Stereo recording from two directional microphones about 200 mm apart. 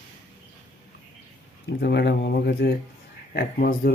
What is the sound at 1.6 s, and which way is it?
Speech, 55° left (ahead or behind).